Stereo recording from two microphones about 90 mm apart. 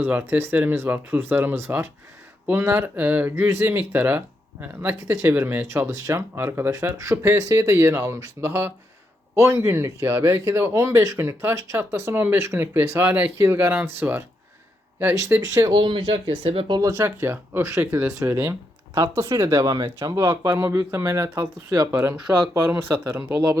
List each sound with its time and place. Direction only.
0.0 s speech: 25° right (ahead or behind)
5.1 s speech: 30° right (ahead or behind)
6.7 s speech: 40° right (ahead or behind)
15.4 s speech: 40° right (ahead or behind)
15.8 s speech: 70° right (ahead or behind)
17.2 s speech: 25° right (ahead or behind)
19.2 s speech: 60° right (ahead or behind)
19.5 s speech: 40° right (ahead or behind)
20.1 s speech: 35° right (ahead or behind)